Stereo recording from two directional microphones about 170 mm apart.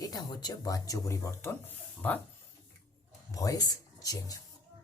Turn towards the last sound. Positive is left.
turn(degrees=20)  # may be behind; listen again after turning